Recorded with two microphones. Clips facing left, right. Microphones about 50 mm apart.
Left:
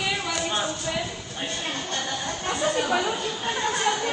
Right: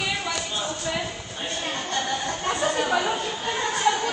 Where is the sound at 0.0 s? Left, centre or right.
Centre.